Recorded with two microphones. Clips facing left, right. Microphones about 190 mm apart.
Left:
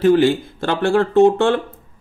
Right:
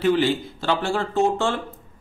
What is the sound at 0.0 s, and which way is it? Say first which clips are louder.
Speech: left 6 dB; 45° left (ahead or behind).